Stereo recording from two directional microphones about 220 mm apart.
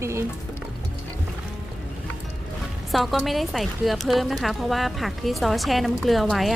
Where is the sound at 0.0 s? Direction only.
10° right (ahead or behind).